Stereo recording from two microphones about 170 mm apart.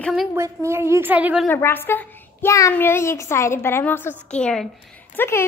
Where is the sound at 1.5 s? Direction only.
10° left (ahead or behind).